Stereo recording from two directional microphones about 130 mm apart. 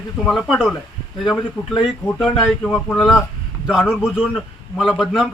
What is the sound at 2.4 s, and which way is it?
Speech, 10° left (ahead or behind).